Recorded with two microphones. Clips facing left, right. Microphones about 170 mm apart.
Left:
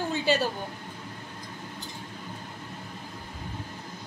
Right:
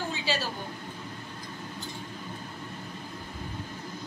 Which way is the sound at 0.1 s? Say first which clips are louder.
Left 6 dB; 55° left (ahead or behind).